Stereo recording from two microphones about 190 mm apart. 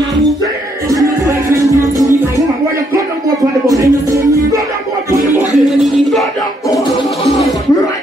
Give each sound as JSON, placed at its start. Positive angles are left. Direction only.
{"t": 0.8, "sound": "music", "side_deg": -15}
{"t": 3.6, "sound": "music", "side_deg": -15}
{"t": 5.7, "sound": "a sound", "side_deg": 0}